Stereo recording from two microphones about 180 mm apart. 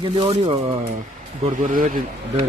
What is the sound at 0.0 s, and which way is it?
Speech, 30° right (ahead or behind).